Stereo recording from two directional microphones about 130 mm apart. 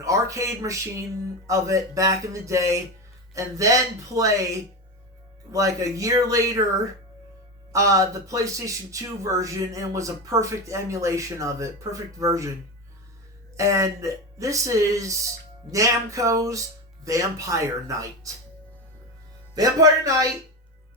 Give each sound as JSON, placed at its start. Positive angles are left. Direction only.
{"t": 0.0, "sound": "speech", "side_deg": -25}
{"t": 5.5, "sound": "speech", "side_deg": -25}
{"t": 7.7, "sound": "speech", "side_deg": -25}
{"t": 13.6, "sound": "speech", "side_deg": -25}
{"t": 19.5, "sound": "speech", "side_deg": -25}